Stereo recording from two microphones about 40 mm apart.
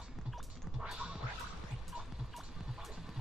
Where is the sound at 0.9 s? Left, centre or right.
Right.